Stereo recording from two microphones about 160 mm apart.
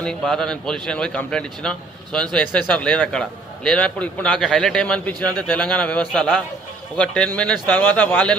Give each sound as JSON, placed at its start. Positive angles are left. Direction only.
{"t": 0.0, "sound": "a man's voice", "side_deg": 5}